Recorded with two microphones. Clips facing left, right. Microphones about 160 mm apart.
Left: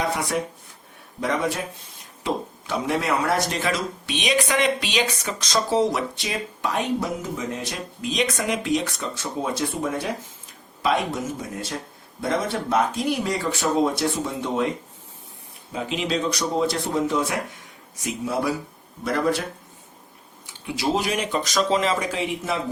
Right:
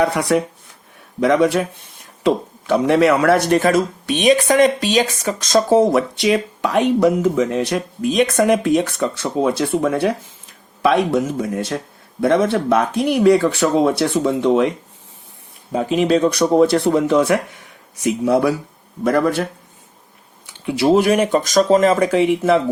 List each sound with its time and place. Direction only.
0.3 s speech: 70° right (ahead or behind)
1.2 s speech: 85° right
2.2 s speech: 60° right (ahead or behind)
6.2 s speech: 75° right (ahead or behind); by 9.3 s 50° right (ahead or behind)
9.4 s speech: 70° right (ahead or behind)
15.7 s speech: 50° right (ahead or behind); by 18.5 s 70° right (ahead or behind)
20.7 s speech: 60° right (ahead or behind)